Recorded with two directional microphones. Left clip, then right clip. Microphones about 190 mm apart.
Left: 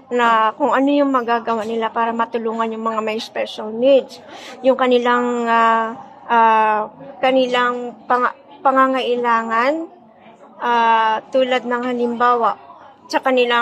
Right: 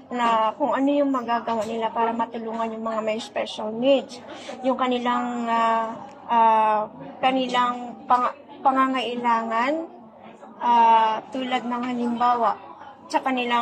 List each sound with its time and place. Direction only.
0.1 s a woman's voice: 45° left (ahead or behind)